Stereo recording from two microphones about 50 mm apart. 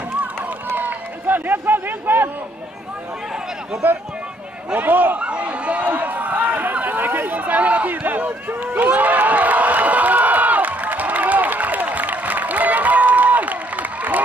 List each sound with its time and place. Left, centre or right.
0.7 s run: right
3.8 s a man's voice: right
5.2 s a sound: right